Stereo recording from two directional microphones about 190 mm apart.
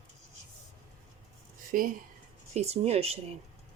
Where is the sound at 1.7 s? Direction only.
45° right (ahead or behind).